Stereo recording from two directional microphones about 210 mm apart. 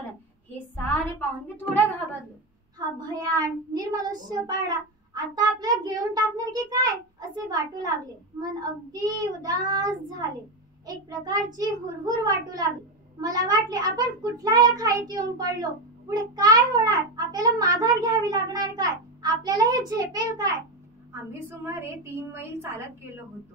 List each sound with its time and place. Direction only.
0.7 s a sound: 10° left (ahead or behind)
1.7 s a woman's voice: 10° left (ahead or behind)
3.0 s a child's voice: 15° right (ahead or behind)